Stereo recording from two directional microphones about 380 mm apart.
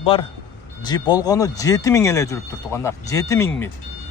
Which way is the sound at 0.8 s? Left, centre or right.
Centre.